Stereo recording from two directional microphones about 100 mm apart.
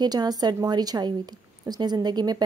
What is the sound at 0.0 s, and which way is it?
A woman's voice, 45° right (ahead or behind).